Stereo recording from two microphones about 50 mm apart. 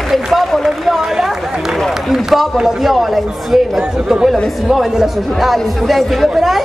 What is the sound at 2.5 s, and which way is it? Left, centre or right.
A man's voice, centre.